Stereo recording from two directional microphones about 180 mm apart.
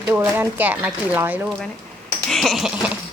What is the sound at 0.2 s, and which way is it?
Speech, 10° right (ahead or behind).